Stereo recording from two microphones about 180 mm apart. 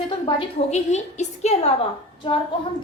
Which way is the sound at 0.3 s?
35° left (ahead or behind).